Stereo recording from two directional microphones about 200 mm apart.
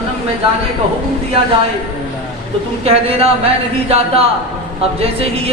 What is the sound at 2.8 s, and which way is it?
A woman's voice, 30° right (ahead or behind).